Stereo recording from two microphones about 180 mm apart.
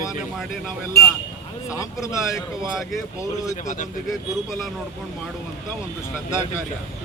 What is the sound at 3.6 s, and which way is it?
Speech, 45° left (ahead or behind).